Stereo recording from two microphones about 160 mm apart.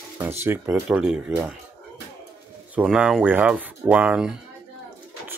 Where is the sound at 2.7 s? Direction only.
5° right (ahead or behind).